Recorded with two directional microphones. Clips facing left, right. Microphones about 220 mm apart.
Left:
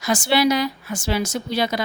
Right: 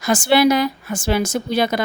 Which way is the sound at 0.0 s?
50° right (ahead or behind).